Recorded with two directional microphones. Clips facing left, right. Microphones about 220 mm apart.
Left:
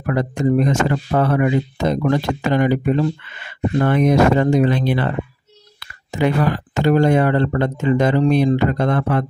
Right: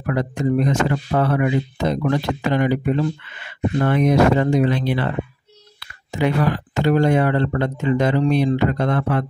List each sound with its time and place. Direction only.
0.0 s speech: 45° left (ahead or behind)
3.8 s speech: 45° left (ahead or behind)
6.1 s speech: 45° left (ahead or behind)